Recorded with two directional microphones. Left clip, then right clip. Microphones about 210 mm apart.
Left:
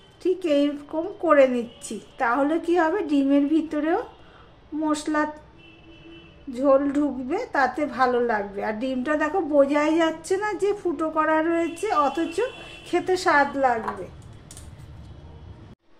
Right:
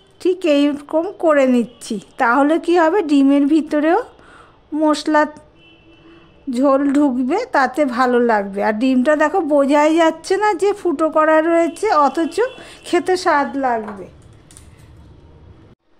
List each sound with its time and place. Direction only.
0.2 s a woman's voice: 55° right (ahead or behind)
6.5 s speech: 55° right (ahead or behind)